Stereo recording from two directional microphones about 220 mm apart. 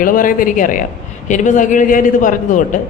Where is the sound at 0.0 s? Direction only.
40° left (ahead or behind).